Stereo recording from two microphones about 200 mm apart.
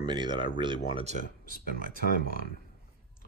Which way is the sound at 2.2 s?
45° left (ahead or behind).